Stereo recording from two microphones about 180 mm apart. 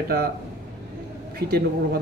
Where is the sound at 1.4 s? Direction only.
60° right (ahead or behind).